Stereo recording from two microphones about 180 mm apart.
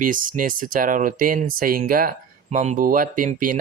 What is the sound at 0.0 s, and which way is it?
Speech, 50° right (ahead or behind).